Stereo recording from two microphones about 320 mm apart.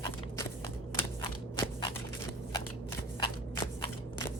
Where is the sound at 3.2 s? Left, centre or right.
Centre.